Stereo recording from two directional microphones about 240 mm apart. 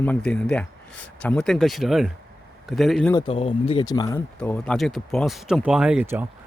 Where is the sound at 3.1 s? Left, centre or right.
Left; by 6.2 s centre.